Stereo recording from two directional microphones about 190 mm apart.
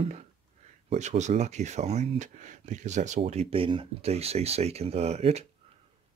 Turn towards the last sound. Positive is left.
turn(degrees=-35)  # may be behind; listen again after turning